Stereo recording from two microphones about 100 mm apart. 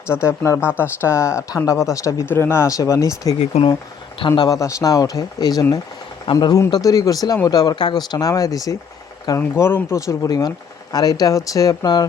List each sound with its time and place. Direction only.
0.1 s speech: 25° left (ahead or behind)
0.6 s speech: 15° right (ahead or behind)
1.0 s speech: 30° left (ahead or behind)
3.4 s speech: 90° left
4.3 s speech: 40° left (ahead or behind)
9.6 s speech: 25° left (ahead or behind)
10.2 s speech: 40° left (ahead or behind)